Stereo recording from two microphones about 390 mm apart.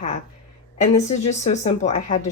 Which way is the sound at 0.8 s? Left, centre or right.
Centre.